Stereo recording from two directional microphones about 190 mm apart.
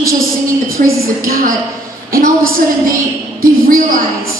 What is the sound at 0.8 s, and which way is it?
Speech, 45° right (ahead or behind).